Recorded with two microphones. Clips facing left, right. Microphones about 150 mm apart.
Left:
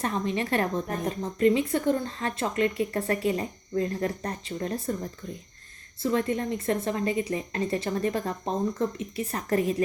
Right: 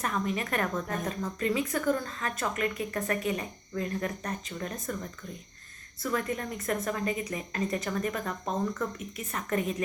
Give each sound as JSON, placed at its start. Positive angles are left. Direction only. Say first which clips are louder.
{"t": 0.0, "sound": "a woman's voice", "louder": "left 3 dB", "side_deg": 30}
{"t": 6.0, "sound": "a woman's voice", "louder": "left 5 dB", "side_deg": 25}